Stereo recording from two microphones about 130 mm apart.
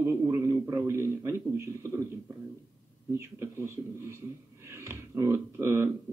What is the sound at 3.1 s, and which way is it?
Speech, 20° right (ahead or behind).